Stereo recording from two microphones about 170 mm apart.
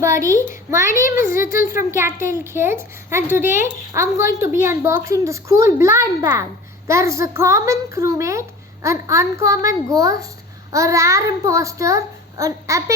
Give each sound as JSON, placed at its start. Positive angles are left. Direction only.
{"t": 0.0, "sound": "a woman's voice", "side_deg": -15}